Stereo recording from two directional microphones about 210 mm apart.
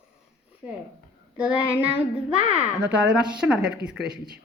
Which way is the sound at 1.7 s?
10° right (ahead or behind).